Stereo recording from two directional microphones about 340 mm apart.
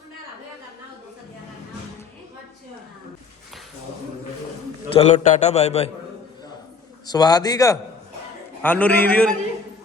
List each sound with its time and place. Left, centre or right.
4.9 s a man's voice: centre
7.1 s a man's voice: centre